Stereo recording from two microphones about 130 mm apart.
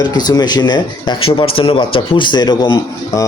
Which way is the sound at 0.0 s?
35° left (ahead or behind).